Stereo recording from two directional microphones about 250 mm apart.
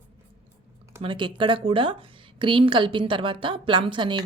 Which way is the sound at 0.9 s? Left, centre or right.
Centre.